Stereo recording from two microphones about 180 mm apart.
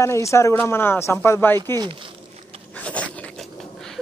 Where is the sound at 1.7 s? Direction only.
25° right (ahead or behind).